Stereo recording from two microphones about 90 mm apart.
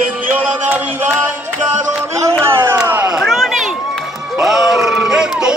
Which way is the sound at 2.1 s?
30° right (ahead or behind).